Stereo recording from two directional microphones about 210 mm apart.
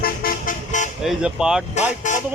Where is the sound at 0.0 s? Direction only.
45° left (ahead or behind).